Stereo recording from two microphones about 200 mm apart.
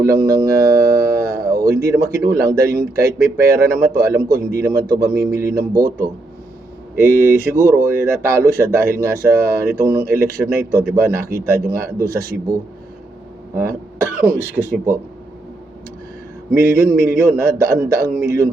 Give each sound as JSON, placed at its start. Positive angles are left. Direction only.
{"t": 0.0, "sound": "speech", "side_deg": -15}
{"t": 0.9, "sound": "a sound", "side_deg": -15}
{"t": 1.8, "sound": "speech", "side_deg": -15}
{"t": 13.6, "sound": "speech", "side_deg": -15}
{"t": 16.5, "sound": "speech", "side_deg": -15}